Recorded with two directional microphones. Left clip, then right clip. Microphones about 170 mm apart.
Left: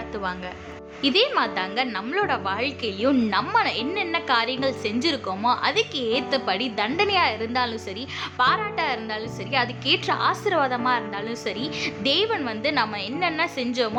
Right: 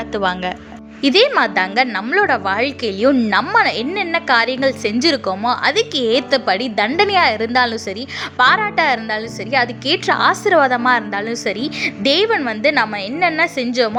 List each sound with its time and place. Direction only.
0.1 s a woman's voice: 50° right (ahead or behind); by 13.9 s 35° right (ahead or behind)